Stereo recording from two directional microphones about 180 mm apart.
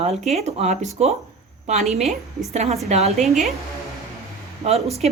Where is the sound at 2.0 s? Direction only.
Centre (ahead or behind).